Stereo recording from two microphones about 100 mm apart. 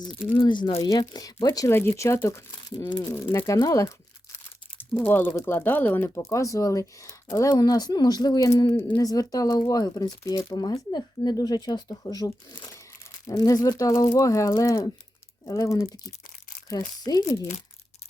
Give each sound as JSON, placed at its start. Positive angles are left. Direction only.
{"t": 0.0, "sound": "speech", "side_deg": 55}
{"t": 0.8, "sound": "speech", "side_deg": 40}
{"t": 1.7, "sound": "speech", "side_deg": 25}
{"t": 2.5, "sound": "speech", "side_deg": 50}
{"t": 3.3, "sound": "speech", "side_deg": 30}
{"t": 4.8, "sound": "speech", "side_deg": 20}